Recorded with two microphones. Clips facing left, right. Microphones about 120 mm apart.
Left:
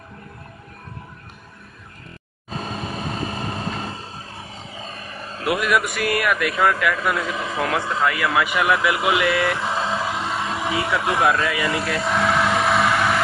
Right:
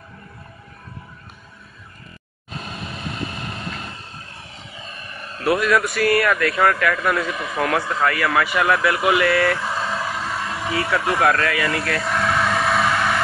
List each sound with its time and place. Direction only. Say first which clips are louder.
2.5 s vehicle: left 4 dB; 35° left (ahead or behind)
5.6 s speech: right 2 dB; 15° left (ahead or behind)